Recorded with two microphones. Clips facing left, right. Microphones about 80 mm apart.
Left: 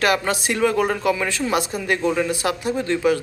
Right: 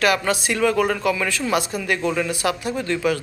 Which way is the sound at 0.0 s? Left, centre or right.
Left.